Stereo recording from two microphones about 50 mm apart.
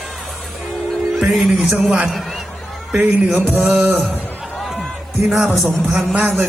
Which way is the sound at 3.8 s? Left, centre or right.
Right.